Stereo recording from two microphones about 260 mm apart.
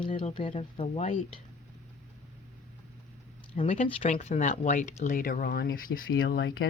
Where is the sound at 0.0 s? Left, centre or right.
Left.